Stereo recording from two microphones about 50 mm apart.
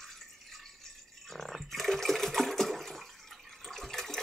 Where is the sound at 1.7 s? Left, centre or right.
Centre.